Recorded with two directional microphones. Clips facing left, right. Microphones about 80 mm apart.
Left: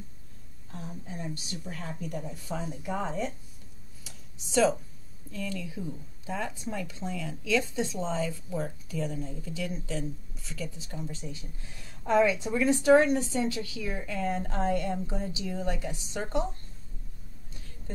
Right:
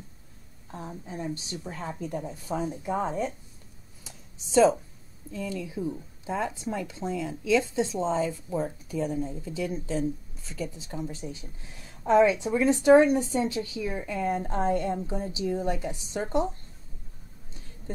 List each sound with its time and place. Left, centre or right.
0.7 s speech: right
4.0 s a sound: right
5.3 s speech: right